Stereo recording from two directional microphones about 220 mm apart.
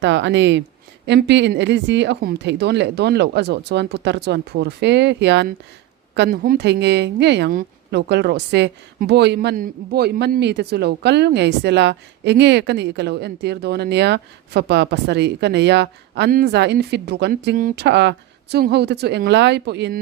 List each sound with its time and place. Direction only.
0.0 s a woman's voice: 55° right (ahead or behind)